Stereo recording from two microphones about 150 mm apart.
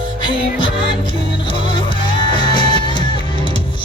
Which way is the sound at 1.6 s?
35° left (ahead or behind).